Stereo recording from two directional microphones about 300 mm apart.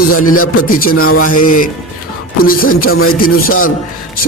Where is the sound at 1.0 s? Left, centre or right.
Left.